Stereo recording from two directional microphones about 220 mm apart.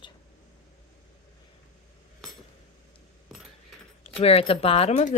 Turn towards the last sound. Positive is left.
turn(degrees=30)  # may be behind; listen again after turning